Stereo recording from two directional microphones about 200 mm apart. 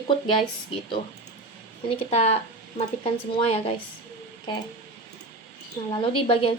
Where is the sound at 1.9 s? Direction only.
30° left (ahead or behind).